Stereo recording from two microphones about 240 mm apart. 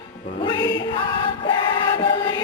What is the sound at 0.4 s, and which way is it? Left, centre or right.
Music, centre.